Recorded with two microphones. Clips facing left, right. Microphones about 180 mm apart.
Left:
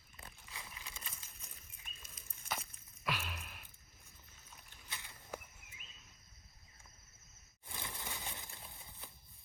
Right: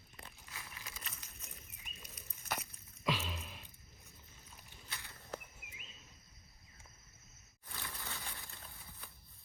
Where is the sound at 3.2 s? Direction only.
10° left (ahead or behind).